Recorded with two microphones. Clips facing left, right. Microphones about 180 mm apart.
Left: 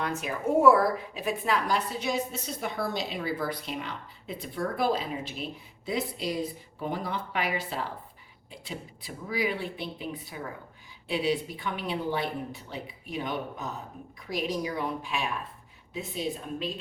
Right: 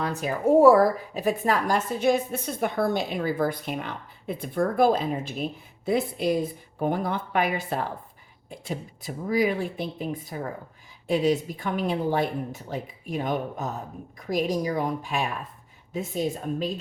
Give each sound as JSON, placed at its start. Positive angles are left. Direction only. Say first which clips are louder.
{"t": 0.0, "sound": "a woman's voice", "louder": "right 5 dB", "side_deg": -35}